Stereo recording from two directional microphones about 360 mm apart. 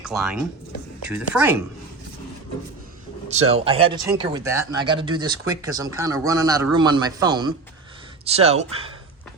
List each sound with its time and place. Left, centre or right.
0.0 s speech: centre
3.5 s speech: centre